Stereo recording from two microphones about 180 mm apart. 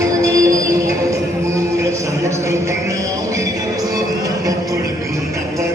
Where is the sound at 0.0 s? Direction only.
20° right (ahead or behind).